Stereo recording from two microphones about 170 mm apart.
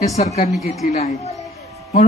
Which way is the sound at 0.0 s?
40° left (ahead or behind).